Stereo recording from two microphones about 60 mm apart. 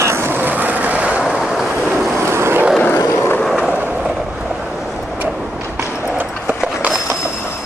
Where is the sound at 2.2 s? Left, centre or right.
Right.